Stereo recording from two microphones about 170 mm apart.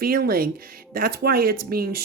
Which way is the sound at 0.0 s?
60° right (ahead or behind).